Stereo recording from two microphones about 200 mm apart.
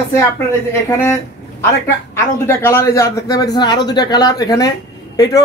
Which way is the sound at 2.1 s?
15° left (ahead or behind).